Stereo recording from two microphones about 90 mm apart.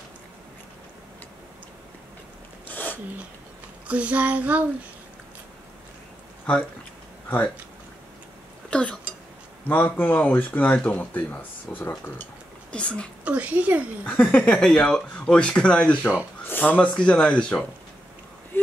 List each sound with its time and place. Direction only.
2.7 s sneeze: 20° left (ahead or behind)
3.8 s child singing: 15° right (ahead or behind)
7.2 s speech: 20° left (ahead or behind)
8.6 s a sound: 10° left (ahead or behind)
9.7 s speech: 20° left (ahead or behind)
13.2 s child singing: 15° right (ahead or behind)
14.0 s speech: 15° left (ahead or behind)